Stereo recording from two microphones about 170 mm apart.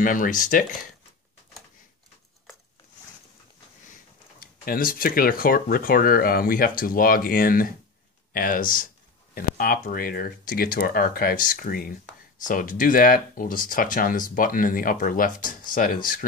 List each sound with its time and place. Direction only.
0.0 s speech: 55° left (ahead or behind)
4.4 s speech: 60° left (ahead or behind)